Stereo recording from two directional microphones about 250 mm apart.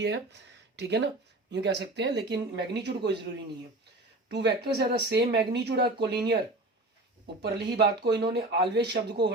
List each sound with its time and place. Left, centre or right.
0.8 s speech: right
4.3 s speech: right
7.4 s speech: right